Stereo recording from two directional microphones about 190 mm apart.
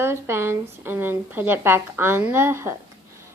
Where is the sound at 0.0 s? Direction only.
15° right (ahead or behind).